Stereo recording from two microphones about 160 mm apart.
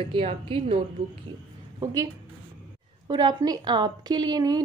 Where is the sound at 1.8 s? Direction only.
25° right (ahead or behind).